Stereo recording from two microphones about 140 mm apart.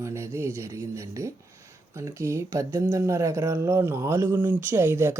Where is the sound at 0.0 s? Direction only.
20° right (ahead or behind).